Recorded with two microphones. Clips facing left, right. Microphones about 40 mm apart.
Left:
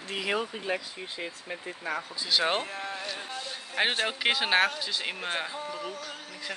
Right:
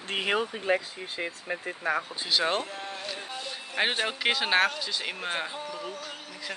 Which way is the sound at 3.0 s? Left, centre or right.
Centre.